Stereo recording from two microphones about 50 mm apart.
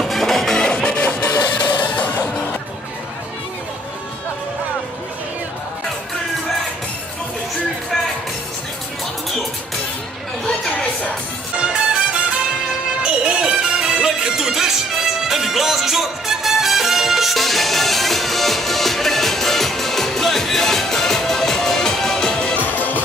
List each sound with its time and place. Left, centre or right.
0.0 s music: centre; by 2.2 s left
13.0 s music: centre
22.6 s music: left